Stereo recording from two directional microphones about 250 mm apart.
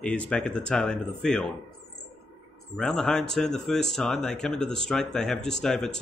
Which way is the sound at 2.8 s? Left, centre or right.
Centre.